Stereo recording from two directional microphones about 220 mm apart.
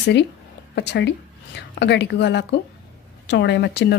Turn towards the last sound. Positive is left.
turn(degrees=50)  # may be behind; listen again after turning